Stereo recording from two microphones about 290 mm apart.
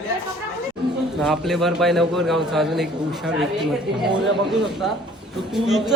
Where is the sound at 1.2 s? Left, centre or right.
Centre.